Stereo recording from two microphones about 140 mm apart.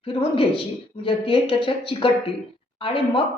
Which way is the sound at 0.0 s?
40° left (ahead or behind).